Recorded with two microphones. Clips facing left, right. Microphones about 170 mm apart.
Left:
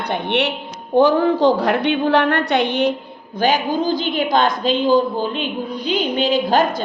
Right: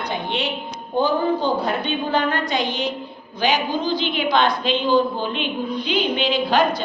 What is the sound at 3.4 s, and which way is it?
A woman's voice, 50° left (ahead or behind).